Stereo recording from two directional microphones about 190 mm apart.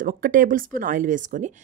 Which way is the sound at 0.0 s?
50° right (ahead or behind).